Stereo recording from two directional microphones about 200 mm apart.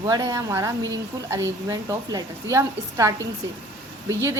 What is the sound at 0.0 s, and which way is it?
A woman's voice, 20° right (ahead or behind).